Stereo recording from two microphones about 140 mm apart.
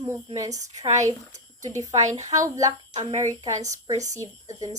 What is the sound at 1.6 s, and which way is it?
Speech, 25° right (ahead or behind).